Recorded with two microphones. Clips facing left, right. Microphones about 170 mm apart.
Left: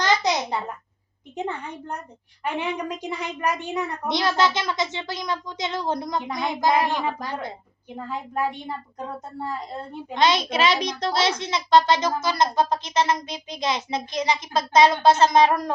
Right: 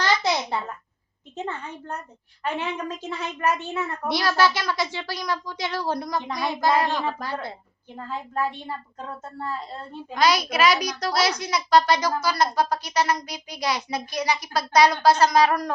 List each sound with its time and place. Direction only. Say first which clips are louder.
0.0 s a sound: left 1 dB; 15° left (ahead or behind)
1.4 s a woman's voice: left 2 dB; 15° left (ahead or behind)
10.2 s a woman's voice: even; 25° left (ahead or behind)